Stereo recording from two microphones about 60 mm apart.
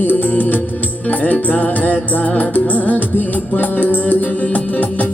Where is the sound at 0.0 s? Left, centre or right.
Left.